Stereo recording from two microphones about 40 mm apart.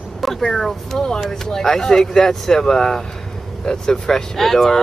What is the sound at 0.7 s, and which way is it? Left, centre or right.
Speech, centre.